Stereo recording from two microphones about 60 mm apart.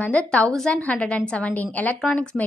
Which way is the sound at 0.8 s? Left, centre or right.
Centre.